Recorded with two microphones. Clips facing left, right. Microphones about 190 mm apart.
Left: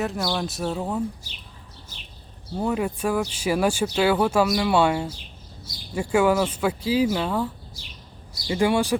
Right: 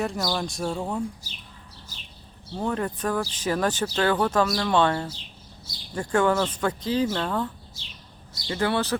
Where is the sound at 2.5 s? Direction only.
10° left (ahead or behind).